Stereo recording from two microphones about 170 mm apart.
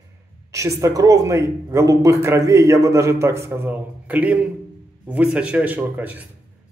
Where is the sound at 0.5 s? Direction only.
20° right (ahead or behind).